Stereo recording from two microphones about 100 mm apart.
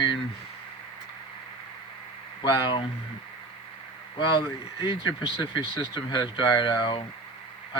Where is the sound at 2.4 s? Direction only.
45° left (ahead or behind).